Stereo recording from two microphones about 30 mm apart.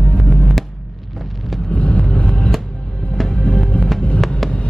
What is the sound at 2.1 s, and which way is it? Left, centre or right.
Music, left.